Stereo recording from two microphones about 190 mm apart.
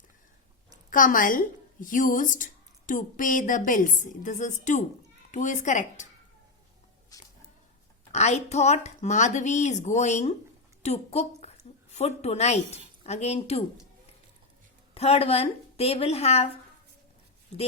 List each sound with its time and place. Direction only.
0.9 s a woman's voice: 45° left (ahead or behind)
7.1 s a sound: 20° left (ahead or behind)
8.1 s a woman's voice: 35° left (ahead or behind)
14.9 s speech: 30° left (ahead or behind)